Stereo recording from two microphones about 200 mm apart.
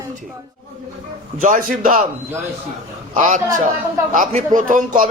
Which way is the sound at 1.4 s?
40° right (ahead or behind).